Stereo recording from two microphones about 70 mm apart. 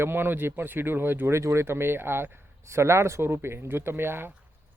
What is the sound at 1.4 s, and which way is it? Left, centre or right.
Speech, right.